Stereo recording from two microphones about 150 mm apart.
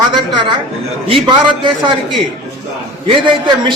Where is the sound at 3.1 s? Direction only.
35° right (ahead or behind).